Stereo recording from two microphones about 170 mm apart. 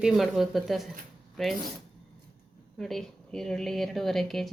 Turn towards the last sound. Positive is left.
turn(degrees=0)  # may be behind; listen again after turning